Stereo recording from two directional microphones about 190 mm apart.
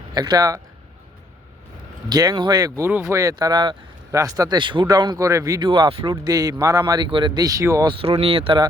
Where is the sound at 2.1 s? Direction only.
20° right (ahead or behind).